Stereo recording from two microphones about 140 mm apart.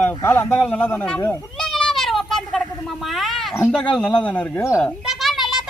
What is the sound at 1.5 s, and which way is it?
Cat, 5° left (ahead or behind).